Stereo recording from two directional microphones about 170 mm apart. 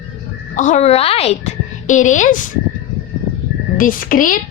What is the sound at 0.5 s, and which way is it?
A woman's voice, 45° left (ahead or behind).